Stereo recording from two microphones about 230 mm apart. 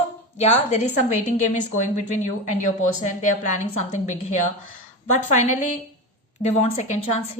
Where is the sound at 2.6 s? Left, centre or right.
Left.